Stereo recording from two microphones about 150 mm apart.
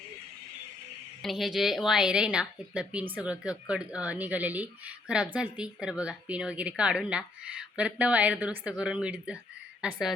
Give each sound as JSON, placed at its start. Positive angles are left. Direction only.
{"t": 1.2, "sound": "a woman's voice", "side_deg": 0}